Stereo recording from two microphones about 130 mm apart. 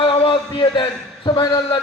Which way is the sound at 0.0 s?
40° left (ahead or behind).